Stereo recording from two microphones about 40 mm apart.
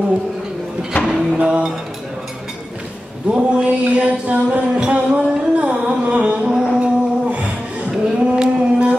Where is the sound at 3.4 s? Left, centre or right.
Right.